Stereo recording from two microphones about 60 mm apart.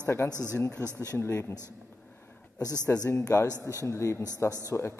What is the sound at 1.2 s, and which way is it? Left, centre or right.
Speech, left.